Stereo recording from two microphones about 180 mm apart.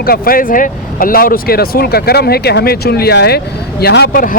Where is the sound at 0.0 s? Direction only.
55° left (ahead or behind).